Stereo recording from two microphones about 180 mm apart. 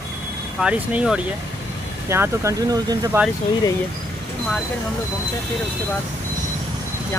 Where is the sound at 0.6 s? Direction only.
5° right (ahead or behind).